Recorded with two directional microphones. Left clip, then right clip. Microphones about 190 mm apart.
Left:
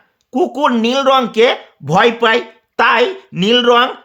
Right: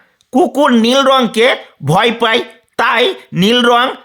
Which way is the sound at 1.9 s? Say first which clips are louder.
Even; 30° right (ahead or behind).